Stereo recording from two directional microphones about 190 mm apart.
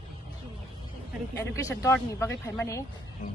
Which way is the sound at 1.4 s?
15° left (ahead or behind).